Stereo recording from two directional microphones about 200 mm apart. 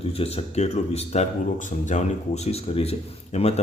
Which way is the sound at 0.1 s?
30° left (ahead or behind).